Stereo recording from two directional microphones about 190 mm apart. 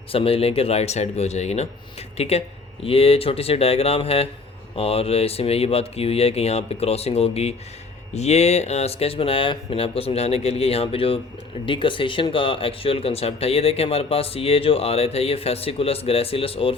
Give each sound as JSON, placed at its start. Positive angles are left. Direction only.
{"t": 0.1, "sound": "speech", "side_deg": 30}